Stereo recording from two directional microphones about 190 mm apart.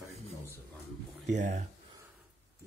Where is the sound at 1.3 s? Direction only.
40° right (ahead or behind).